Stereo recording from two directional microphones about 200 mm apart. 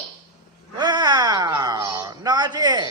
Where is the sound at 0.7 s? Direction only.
20° right (ahead or behind).